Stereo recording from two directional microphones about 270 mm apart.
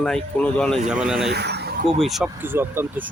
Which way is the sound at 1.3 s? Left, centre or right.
Right.